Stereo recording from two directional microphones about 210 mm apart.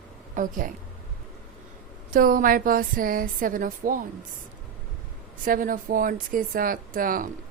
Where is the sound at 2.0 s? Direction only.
40° right (ahead or behind).